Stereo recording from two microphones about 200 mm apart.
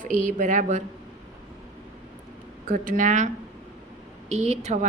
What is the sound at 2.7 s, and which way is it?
Speech, 40° right (ahead or behind).